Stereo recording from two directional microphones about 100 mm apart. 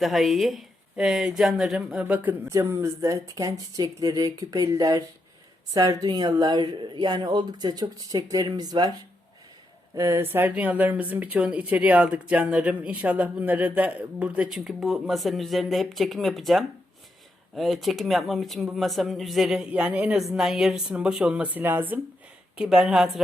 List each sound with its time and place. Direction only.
0.0 s speech: centre (ahead or behind)
2.5 s speech: 30° right (ahead or behind)
9.9 s speech: 30° right (ahead or behind); by 23.2 s 5° right (ahead or behind)